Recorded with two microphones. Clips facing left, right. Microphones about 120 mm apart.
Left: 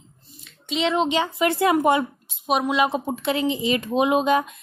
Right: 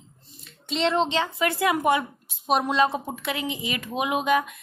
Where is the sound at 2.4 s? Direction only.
5° left (ahead or behind).